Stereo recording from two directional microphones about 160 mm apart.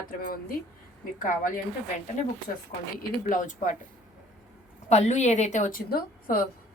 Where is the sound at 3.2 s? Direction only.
55° left (ahead or behind).